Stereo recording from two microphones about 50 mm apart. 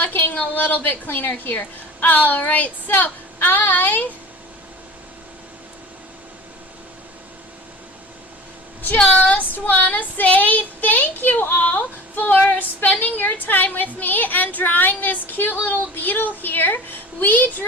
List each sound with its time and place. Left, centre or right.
0.0 s a woman's voice: left
2.4 s child singing: left
9.0 s child singing: left